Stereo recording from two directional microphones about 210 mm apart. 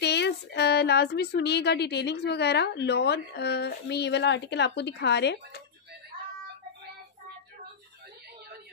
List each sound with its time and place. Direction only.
0.0 s speech: 55° left (ahead or behind)